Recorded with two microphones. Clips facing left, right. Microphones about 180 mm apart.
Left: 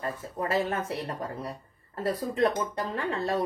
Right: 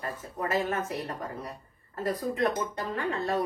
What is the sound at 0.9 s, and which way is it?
Speech, 30° left (ahead or behind).